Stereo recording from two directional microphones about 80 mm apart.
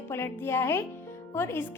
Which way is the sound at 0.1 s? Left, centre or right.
Left.